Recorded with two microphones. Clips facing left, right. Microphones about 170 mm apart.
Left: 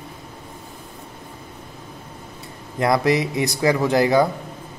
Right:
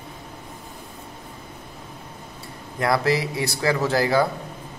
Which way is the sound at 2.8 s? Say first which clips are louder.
Left 3 dB; 20° left (ahead or behind).